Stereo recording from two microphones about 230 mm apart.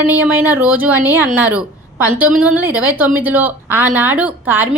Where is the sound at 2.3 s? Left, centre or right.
Centre.